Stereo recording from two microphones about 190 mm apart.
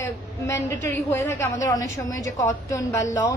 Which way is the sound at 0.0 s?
15° left (ahead or behind).